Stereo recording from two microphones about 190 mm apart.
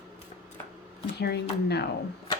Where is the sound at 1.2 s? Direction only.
60° left (ahead or behind).